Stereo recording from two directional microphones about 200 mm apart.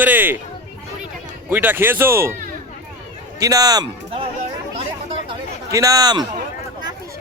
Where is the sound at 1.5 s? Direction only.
10° right (ahead or behind).